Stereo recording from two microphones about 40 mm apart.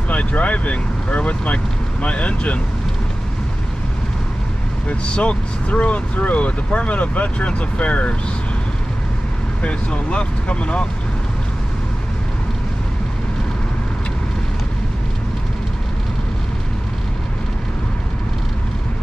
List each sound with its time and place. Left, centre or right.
0.1 s speech: left
4.8 s speech: left
9.6 s speech: left